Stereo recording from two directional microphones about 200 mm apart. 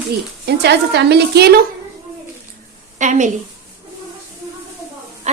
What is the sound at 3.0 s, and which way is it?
Speech, 35° right (ahead or behind).